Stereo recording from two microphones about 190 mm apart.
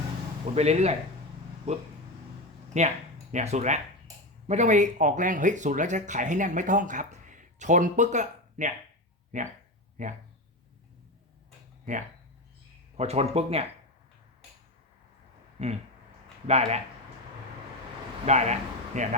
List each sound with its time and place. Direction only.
0.5 s speech: 35° right (ahead or behind)
13.0 s speech: 35° right (ahead or behind)
15.5 s speech: 35° right (ahead or behind)
18.3 s speech: 35° right (ahead or behind)